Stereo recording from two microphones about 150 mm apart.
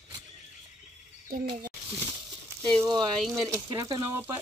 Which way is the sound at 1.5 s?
30° right (ahead or behind).